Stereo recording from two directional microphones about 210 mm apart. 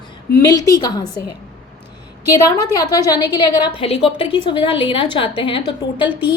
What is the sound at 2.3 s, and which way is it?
A woman's voice, 15° left (ahead or behind).